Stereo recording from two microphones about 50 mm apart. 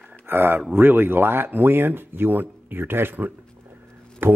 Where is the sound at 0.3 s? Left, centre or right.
Right.